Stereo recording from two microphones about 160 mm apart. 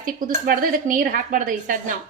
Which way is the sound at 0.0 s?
60° right (ahead or behind).